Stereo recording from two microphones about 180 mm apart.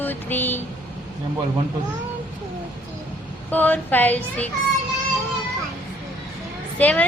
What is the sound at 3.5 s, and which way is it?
Speech, 10° left (ahead or behind).